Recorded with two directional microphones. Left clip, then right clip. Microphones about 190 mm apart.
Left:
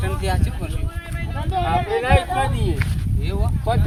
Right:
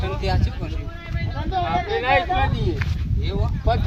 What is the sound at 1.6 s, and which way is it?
Speech, 35° left (ahead or behind).